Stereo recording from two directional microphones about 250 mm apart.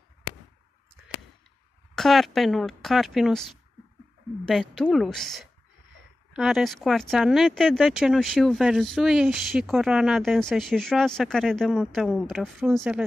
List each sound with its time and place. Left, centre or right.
2.0 s speech: centre